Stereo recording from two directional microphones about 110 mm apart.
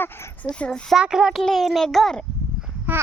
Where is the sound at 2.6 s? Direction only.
5° right (ahead or behind).